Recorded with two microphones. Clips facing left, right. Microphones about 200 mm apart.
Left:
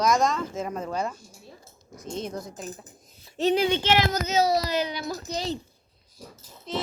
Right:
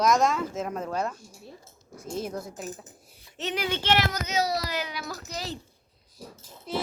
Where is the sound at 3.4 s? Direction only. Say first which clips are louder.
Left 9 dB; 30° left (ahead or behind).